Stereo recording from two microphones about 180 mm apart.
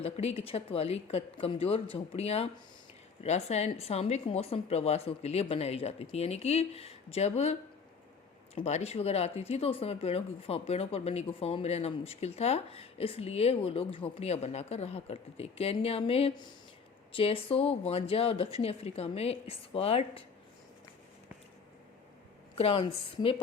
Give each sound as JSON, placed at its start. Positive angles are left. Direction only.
{"t": 0.0, "sound": "speech", "side_deg": 35}
{"t": 8.5, "sound": "speech", "side_deg": 35}
{"t": 22.5, "sound": "speech", "side_deg": 30}